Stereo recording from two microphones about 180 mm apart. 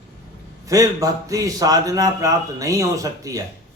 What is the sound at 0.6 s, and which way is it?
A man's voice, 20° right (ahead or behind).